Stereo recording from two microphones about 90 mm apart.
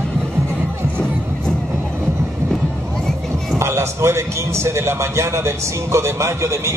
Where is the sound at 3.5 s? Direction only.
30° right (ahead or behind).